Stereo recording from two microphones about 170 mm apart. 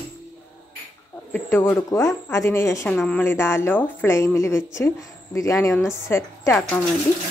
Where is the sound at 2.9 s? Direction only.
5° left (ahead or behind).